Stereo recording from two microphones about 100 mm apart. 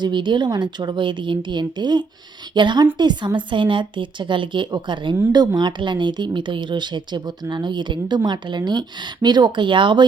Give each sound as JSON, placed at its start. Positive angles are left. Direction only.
{"t": 0.0, "sound": "a woman's voice", "side_deg": -50}